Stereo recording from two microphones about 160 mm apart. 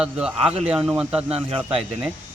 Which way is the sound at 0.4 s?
40° right (ahead or behind).